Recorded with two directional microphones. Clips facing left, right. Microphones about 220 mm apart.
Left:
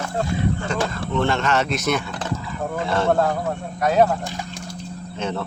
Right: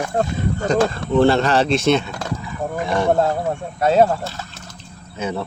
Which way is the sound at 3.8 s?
30° right (ahead or behind).